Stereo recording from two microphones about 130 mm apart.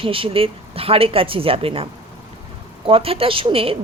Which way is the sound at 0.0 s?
45° right (ahead or behind).